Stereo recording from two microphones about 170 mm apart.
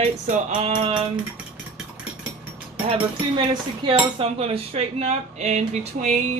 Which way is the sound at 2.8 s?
30° right (ahead or behind).